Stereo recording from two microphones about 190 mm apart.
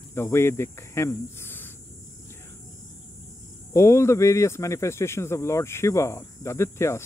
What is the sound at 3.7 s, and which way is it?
Speech, 15° left (ahead or behind).